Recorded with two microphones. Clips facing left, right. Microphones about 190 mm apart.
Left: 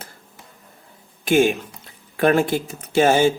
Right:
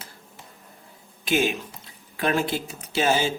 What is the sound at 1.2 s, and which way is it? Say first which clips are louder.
Speech: left 7 dB; 50° left (ahead or behind).